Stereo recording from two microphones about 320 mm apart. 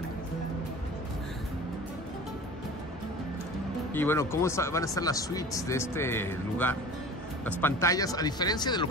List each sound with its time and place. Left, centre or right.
3.9 s speech: centre